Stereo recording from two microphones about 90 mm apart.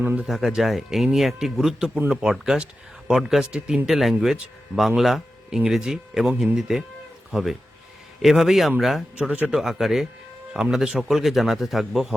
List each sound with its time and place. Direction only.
0.0 s speech: 20° right (ahead or behind)
0.3 s speech: 5° right (ahead or behind)
9.1 s speech: 15° right (ahead or behind)
9.6 s speech: 5° right (ahead or behind)